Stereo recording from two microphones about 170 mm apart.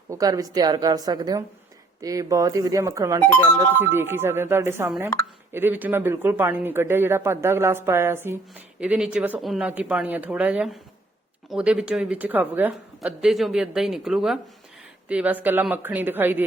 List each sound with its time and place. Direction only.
0.1 s a woman's voice: 20° right (ahead or behind)